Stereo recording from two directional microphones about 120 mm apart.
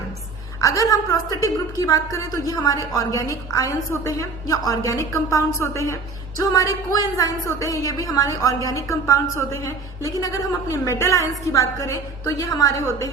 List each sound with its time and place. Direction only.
0.6 s a woman's voice: 30° left (ahead or behind)